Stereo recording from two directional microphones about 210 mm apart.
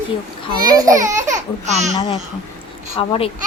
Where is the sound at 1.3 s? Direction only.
35° right (ahead or behind).